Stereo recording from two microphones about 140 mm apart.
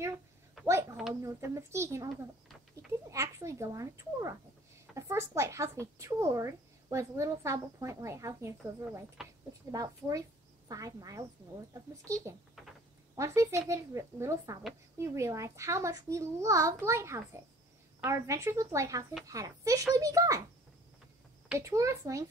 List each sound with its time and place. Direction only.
1.2 s speech: 20° right (ahead or behind)
9.2 s a sound: centre (ahead or behind)
9.7 s speech: 25° right (ahead or behind)
12.3 s speech: 20° right (ahead or behind)
21.5 s speech: 20° right (ahead or behind)